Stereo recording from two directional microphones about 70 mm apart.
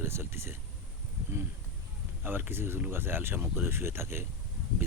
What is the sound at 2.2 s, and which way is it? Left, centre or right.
Speech, right.